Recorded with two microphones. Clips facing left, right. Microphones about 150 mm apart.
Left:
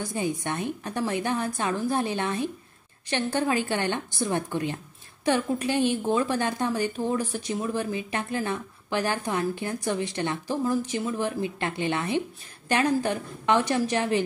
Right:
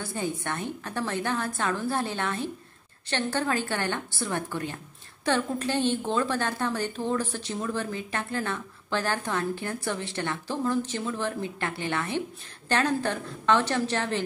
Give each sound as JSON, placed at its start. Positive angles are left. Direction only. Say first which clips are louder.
{"t": 0.0, "sound": "a woman's voice", "louder": "left 3 dB", "side_deg": 15}